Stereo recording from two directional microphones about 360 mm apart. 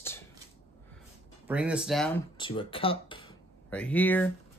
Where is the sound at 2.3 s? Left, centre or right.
Centre.